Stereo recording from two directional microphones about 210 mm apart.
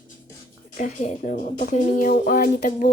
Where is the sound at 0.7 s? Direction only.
35° left (ahead or behind).